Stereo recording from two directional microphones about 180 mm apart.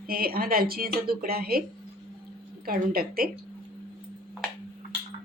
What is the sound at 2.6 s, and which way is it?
Speech, 55° right (ahead or behind).